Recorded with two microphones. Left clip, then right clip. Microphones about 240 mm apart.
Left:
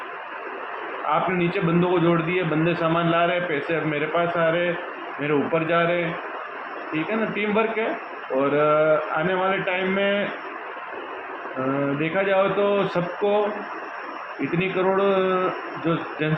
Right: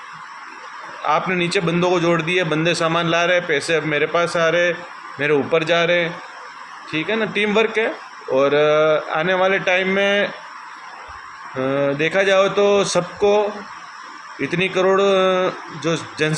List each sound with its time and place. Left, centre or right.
1.0 s a man's voice: centre
11.9 s a man's voice: centre
14.6 s a man's voice: right